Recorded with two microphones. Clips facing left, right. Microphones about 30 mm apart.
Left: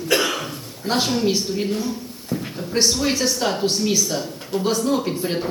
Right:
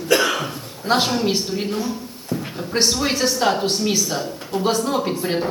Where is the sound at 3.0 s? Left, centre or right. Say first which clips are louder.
Right 2 dB; centre.